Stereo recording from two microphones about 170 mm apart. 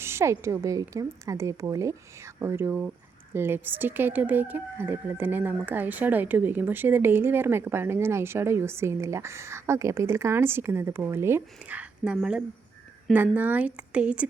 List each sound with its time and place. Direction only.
0.0 s speech: 15° right (ahead or behind)